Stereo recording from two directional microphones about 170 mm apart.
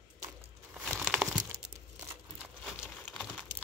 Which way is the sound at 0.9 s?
5° right (ahead or behind).